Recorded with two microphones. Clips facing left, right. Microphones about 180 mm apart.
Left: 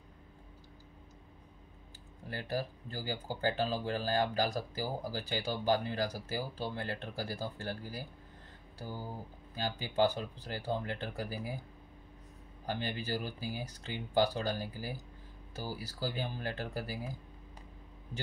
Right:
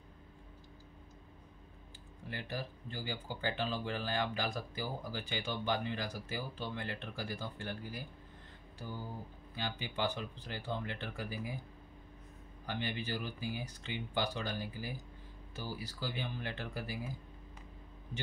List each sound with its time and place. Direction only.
2.2 s speech: 40° left (ahead or behind)
12.6 s speech: 40° left (ahead or behind)